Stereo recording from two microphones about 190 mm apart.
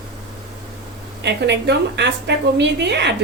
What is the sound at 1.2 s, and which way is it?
A woman's voice, 65° right (ahead or behind).